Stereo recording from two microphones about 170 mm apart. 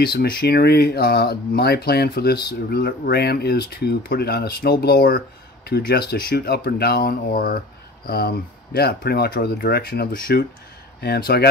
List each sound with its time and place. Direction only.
0.0 s speech: 65° left (ahead or behind)